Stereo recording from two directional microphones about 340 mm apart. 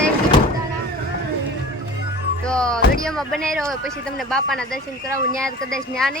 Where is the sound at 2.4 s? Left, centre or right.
Centre.